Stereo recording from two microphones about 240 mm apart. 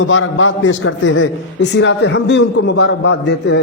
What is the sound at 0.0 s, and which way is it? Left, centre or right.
A man's voice, left.